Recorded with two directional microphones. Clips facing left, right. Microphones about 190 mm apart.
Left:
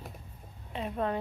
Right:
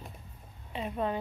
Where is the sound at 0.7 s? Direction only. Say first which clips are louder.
Even; centre (ahead or behind).